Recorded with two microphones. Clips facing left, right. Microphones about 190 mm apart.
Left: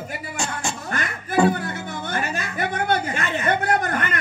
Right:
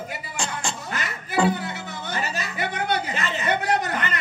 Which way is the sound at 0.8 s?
50° left (ahead or behind).